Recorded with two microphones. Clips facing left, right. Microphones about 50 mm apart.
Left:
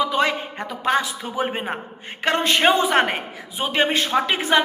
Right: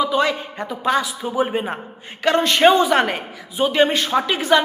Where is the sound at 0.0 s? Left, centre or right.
Left.